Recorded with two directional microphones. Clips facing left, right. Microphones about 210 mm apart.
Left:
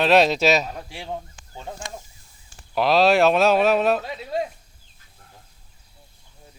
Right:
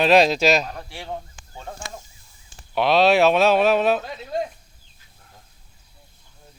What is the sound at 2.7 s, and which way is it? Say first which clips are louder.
Speech: even; centre (ahead or behind).